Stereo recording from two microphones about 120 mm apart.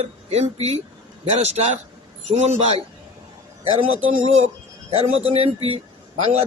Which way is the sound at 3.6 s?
50° right (ahead or behind).